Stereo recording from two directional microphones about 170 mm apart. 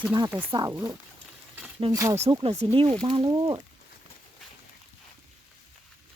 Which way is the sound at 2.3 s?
35° right (ahead or behind).